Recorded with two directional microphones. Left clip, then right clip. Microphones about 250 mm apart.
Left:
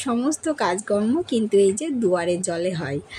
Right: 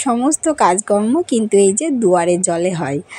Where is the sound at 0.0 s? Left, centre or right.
Centre.